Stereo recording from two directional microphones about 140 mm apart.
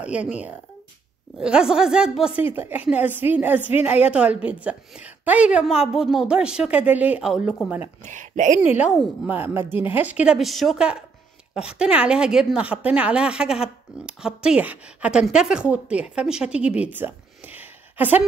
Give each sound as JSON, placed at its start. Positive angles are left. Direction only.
{"t": 0.0, "sound": "a woman's voice", "side_deg": -10}
{"t": 8.0, "sound": "speech", "side_deg": -60}
{"t": 9.2, "sound": "a woman's voice", "side_deg": -15}